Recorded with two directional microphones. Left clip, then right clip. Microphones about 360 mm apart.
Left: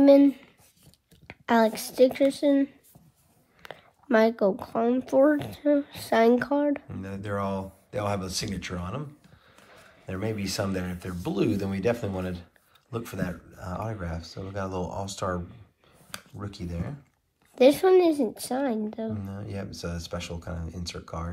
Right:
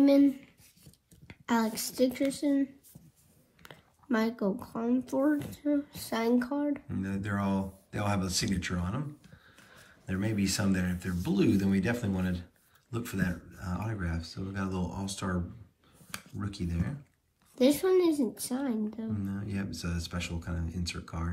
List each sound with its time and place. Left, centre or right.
0.0 s a woman's voice: left
6.9 s speech: centre
10.0 s speech: centre
16.3 s speech: centre
17.6 s speech: left
19.2 s speech: centre